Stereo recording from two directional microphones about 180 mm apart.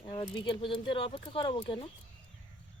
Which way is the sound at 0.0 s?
30° left (ahead or behind).